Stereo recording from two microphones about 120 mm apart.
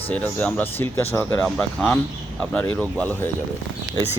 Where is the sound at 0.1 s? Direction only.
15° left (ahead or behind).